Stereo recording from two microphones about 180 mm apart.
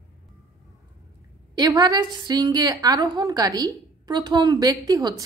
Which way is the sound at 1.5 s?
20° right (ahead or behind).